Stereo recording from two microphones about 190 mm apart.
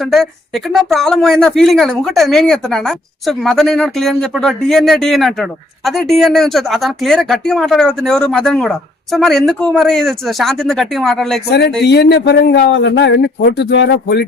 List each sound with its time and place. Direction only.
0.0 s speech: centre (ahead or behind)
11.8 s a man's voice: 60° left (ahead or behind)